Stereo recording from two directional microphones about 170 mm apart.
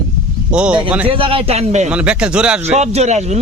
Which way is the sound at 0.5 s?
5° right (ahead or behind).